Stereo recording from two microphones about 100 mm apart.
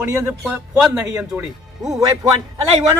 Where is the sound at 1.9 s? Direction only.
35° right (ahead or behind).